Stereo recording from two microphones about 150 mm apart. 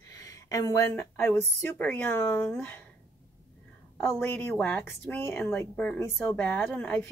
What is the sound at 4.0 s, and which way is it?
A woman's voice, 10° left (ahead or behind).